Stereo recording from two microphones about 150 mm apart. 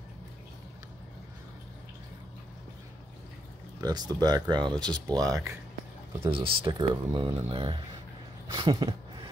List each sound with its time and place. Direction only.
3.8 s speech: 25° right (ahead or behind)
6.2 s speech: 35° right (ahead or behind)
6.6 s speech: 25° right (ahead or behind)
7.4 s speech: 35° right (ahead or behind)
8.5 s a sound: 25° right (ahead or behind)